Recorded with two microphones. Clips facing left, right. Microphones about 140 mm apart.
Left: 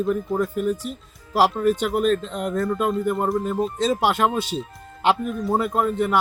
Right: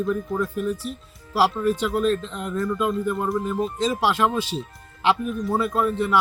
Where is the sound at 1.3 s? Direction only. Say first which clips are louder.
Left 2 dB; 45° left (ahead or behind).